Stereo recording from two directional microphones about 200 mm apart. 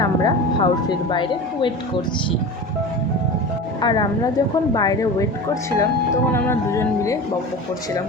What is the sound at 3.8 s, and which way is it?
Speech, 20° left (ahead or behind).